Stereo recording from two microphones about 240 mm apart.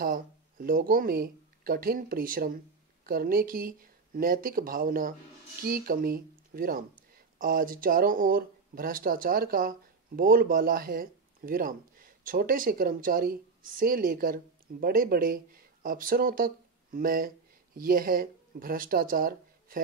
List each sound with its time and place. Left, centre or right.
0.0 s speech: right